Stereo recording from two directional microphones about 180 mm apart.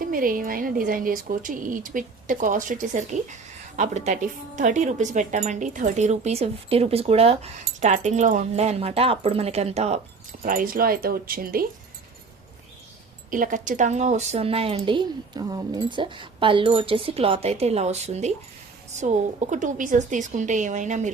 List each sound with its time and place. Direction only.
0.0 s speech: 50° right (ahead or behind)
10.4 s speech: 50° right (ahead or behind)
13.3 s speech: 45° right (ahead or behind)